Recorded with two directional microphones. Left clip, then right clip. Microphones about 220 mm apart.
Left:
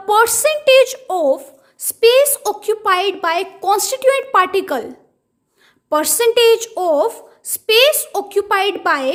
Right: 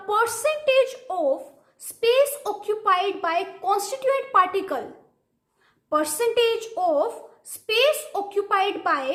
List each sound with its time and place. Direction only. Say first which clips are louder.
0.1 s a woman's voice: left 9 dB; 45° left (ahead or behind)
5.9 s a woman's voice: left 8 dB; 45° left (ahead or behind)